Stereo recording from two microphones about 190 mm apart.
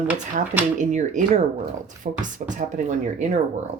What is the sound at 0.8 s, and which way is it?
Speech, 40° right (ahead or behind).